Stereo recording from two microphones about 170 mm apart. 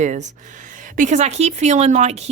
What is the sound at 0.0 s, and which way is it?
Speech, 45° right (ahead or behind).